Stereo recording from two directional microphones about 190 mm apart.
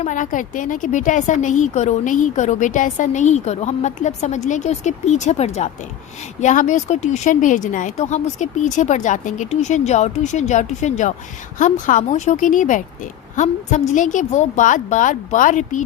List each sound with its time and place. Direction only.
0.0 s a woman's voice: 40° left (ahead or behind)